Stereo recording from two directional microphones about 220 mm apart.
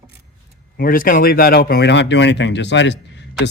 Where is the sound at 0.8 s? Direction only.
40° left (ahead or behind).